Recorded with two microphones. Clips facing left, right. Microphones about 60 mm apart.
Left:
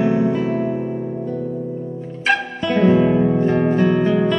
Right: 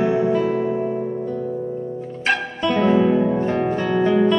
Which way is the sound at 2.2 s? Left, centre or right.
Centre.